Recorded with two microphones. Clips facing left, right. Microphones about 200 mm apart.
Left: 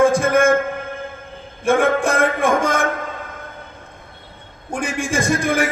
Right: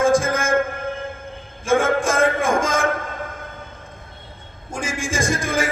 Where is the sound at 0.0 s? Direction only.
65° left (ahead or behind).